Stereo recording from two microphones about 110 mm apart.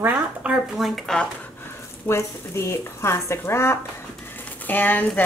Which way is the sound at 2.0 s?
25° left (ahead or behind).